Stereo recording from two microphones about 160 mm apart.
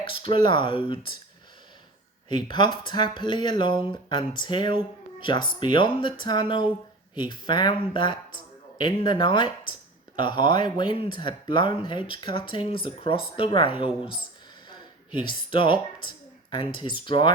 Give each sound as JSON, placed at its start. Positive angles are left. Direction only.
{"t": 0.0, "sound": "speech", "side_deg": 35}
{"t": 2.3, "sound": "speech", "side_deg": 30}
{"t": 15.3, "sound": "speech", "side_deg": 30}